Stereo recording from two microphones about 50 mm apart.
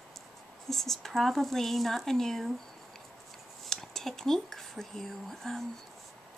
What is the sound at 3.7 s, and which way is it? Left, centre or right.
Speech, centre.